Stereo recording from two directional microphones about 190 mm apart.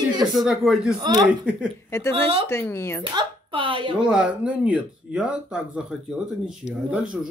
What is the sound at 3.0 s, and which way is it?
Speech, 25° right (ahead or behind).